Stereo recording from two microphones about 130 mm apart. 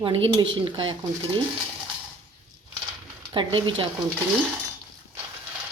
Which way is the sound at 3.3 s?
40° right (ahead or behind).